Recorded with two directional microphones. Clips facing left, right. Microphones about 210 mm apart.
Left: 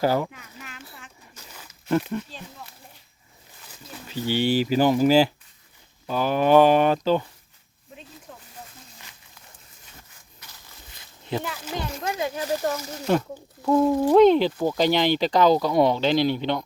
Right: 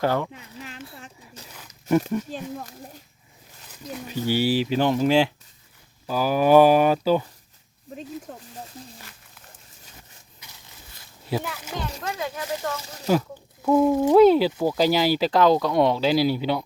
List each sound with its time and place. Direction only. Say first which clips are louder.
0.0 s a child's voice: left 1 dB; 5° left (ahead or behind)
0.3 s a sound: right 4 dB; 30° right (ahead or behind)
2.3 s speech: right 9 dB; 45° right (ahead or behind)
4.0 s speech: right 1 dB; 10° right (ahead or behind)
11.3 s speech: right 1 dB; 5° right (ahead or behind)
12.1 s speech: left 5 dB; 25° left (ahead or behind)
13.1 s speech: right 1 dB; 5° right (ahead or behind)